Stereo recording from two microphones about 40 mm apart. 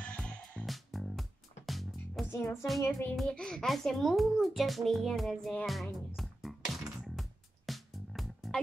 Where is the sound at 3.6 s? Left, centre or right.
Centre.